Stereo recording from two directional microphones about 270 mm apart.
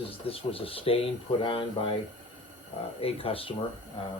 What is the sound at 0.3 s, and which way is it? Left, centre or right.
Speech, left.